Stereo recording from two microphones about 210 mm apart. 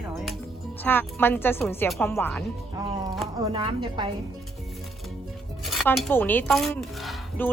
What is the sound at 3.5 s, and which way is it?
Speech, 25° right (ahead or behind).